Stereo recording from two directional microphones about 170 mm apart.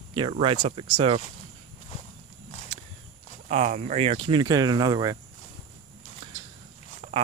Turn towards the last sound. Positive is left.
turn(degrees=-45)  # may be behind; listen again after turning